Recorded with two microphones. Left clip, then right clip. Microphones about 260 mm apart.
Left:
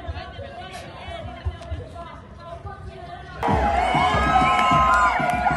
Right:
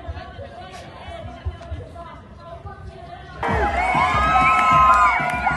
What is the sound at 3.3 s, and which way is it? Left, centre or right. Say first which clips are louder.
Crowd: even; centre.